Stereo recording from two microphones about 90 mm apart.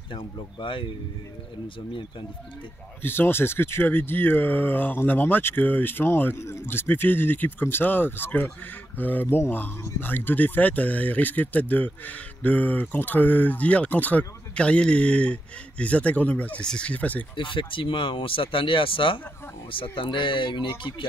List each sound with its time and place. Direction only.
0.1 s speech: 65° left (ahead or behind)
3.0 s speech: 25° left (ahead or behind)
17.4 s speech: 70° left (ahead or behind)